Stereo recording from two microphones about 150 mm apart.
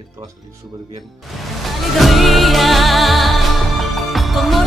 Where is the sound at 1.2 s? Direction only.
Centre (ahead or behind).